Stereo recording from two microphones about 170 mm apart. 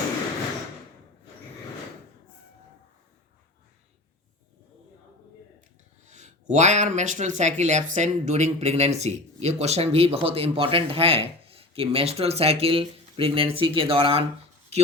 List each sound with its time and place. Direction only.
6.1 s speech: 45° right (ahead or behind)